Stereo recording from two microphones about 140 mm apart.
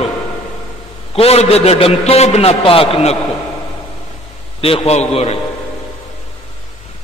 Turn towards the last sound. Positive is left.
turn(degrees=50)  # may be behind; listen again after turning